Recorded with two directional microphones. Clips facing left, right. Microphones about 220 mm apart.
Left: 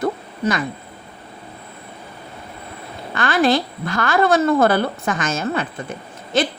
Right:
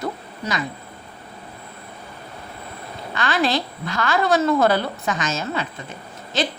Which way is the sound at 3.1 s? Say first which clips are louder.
Left 4 dB; 50° left (ahead or behind).